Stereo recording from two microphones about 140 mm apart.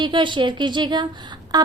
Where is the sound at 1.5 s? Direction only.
30° right (ahead or behind).